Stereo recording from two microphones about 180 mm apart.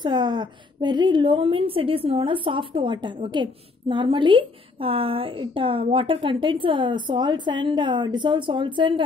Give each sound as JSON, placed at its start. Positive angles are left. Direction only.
{"t": 0.0, "sound": "a woman's voice", "side_deg": -25}